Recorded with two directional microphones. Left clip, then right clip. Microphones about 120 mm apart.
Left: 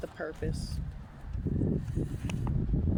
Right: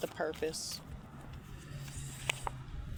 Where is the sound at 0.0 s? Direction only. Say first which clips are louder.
Right 1 dB; 45° left (ahead or behind).